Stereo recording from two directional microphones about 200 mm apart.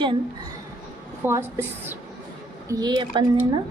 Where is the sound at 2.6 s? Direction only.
20° right (ahead or behind).